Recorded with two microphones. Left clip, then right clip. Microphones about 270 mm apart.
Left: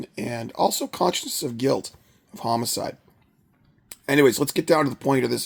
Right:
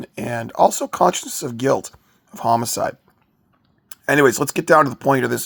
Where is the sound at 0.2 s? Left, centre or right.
Centre.